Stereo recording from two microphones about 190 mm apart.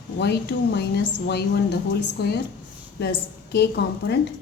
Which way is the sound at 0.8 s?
60° left (ahead or behind).